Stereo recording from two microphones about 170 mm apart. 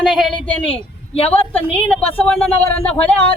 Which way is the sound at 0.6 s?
35° left (ahead or behind).